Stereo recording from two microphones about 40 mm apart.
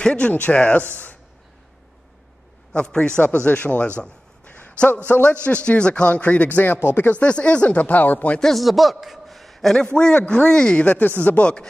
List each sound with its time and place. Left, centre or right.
0.0 s a man's voice: left
2.7 s a man's voice: left
4.5 s a sound: left
4.7 s a man's voice: left
7.8 s speech: left
8.4 s speech: centre
8.6 s a man's voice: centre
9.9 s speech: left
11.0 s a man's voice: left